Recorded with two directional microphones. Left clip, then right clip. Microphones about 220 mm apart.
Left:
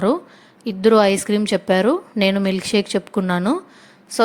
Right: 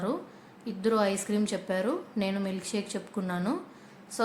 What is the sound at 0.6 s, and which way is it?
A woman's voice, 35° left (ahead or behind).